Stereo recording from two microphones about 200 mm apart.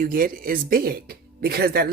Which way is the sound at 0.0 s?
45° right (ahead or behind).